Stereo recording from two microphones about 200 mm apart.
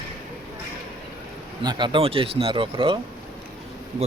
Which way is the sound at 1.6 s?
25° right (ahead or behind).